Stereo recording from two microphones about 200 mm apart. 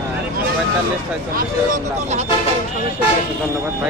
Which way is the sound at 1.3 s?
40° right (ahead or behind).